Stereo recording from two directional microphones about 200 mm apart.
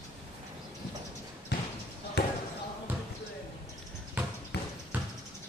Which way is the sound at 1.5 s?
55° left (ahead or behind).